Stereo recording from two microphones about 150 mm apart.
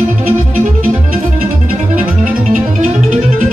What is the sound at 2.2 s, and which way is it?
Music, 60° right (ahead or behind).